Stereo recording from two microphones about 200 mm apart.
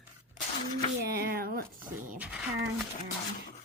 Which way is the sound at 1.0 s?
50° right (ahead or behind).